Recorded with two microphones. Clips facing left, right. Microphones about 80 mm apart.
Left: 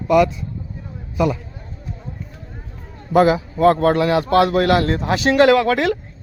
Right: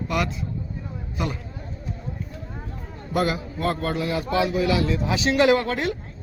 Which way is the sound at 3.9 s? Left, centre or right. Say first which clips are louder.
Left 9 dB; left.